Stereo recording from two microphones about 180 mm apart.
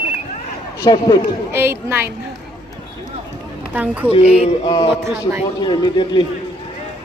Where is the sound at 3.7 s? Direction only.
10° right (ahead or behind).